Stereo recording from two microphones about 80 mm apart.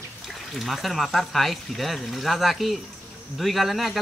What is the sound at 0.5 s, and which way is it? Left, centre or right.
Speech, centre.